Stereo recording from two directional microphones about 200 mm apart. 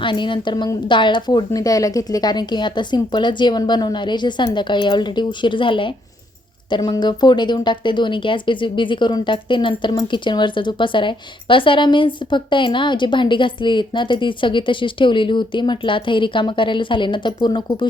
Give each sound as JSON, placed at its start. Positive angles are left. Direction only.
{"t": 0.0, "sound": "speech", "side_deg": 25}